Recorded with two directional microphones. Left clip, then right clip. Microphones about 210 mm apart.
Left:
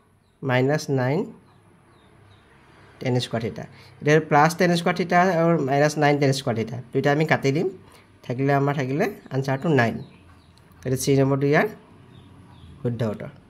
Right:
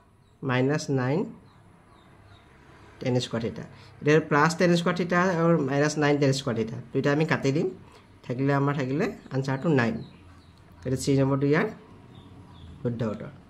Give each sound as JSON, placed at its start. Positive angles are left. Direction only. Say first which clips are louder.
{"t": 0.4, "sound": "speech", "louder": "left 4 dB", "side_deg": 25}
{"t": 3.0, "sound": "speech", "louder": "left 2 dB", "side_deg": 25}
{"t": 12.8, "sound": "speech", "louder": "left 3 dB", "side_deg": 35}